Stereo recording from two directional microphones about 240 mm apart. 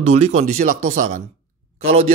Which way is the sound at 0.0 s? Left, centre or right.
Right.